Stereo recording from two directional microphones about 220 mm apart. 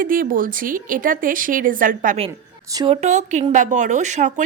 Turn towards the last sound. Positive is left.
turn(degrees=-35)  # may be behind; listen again after turning